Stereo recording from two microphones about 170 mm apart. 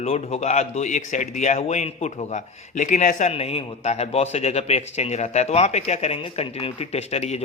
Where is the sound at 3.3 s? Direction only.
35° left (ahead or behind).